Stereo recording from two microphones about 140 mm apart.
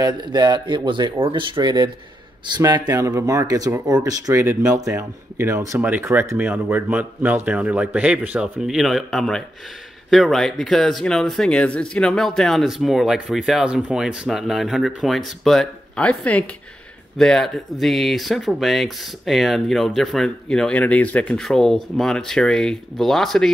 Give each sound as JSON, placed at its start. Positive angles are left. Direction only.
{"t": 0.0, "sound": "a man's voice", "side_deg": -30}